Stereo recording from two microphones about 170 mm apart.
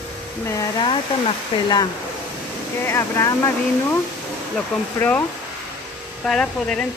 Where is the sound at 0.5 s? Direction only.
20° left (ahead or behind).